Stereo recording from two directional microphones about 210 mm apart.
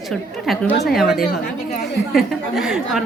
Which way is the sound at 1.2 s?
45° left (ahead or behind).